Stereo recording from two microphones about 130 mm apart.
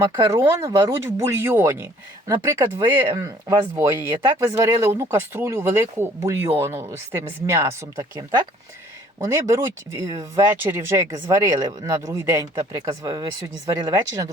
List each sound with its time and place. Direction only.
0.0 s speech: 25° right (ahead or behind)
9.2 s speech: 20° right (ahead or behind)